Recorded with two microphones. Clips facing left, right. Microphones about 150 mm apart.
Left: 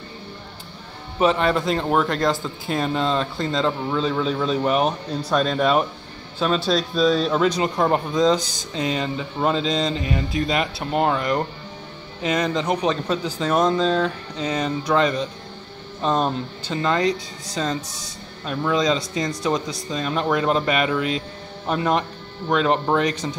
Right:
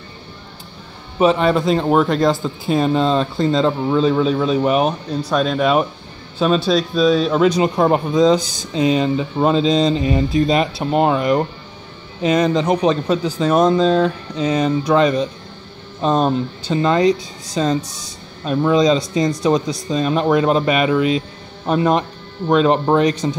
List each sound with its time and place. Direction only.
1.2 s speech: 15° right (ahead or behind)